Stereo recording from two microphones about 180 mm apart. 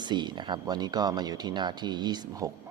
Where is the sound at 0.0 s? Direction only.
25° right (ahead or behind).